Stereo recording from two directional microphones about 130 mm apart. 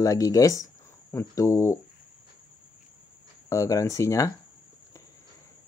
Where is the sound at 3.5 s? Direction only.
25° left (ahead or behind).